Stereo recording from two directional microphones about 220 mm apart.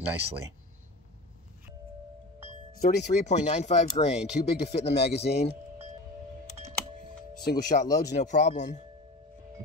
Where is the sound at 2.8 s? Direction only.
35° left (ahead or behind).